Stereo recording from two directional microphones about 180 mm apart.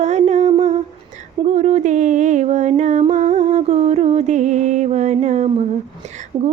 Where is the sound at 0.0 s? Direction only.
40° right (ahead or behind).